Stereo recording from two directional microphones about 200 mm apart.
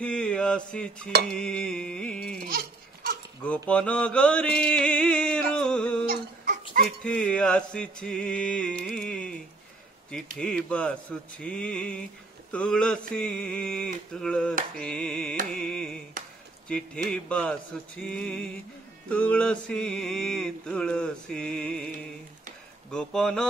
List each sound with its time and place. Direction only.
0.0 s mantra: 5° left (ahead or behind)
2.4 s a sound: 45° right (ahead or behind)
3.4 s mantra: 5° left (ahead or behind)
10.3 s mantra: 5° left (ahead or behind)
18.0 s music: 5° left (ahead or behind)
19.0 s mantra: 5° left (ahead or behind)
22.8 s mantra: 5° left (ahead or behind)